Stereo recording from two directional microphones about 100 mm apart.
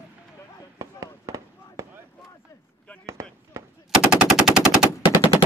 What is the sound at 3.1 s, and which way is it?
Fireworks, 30° right (ahead or behind).